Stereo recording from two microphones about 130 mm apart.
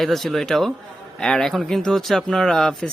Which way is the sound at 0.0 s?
Centre (ahead or behind).